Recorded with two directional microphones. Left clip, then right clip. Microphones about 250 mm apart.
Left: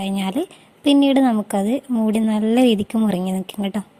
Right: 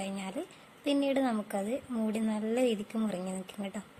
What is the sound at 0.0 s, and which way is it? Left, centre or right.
A woman's voice, left.